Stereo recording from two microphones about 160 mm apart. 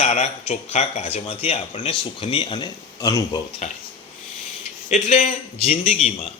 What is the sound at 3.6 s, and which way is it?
Speech, 45° left (ahead or behind).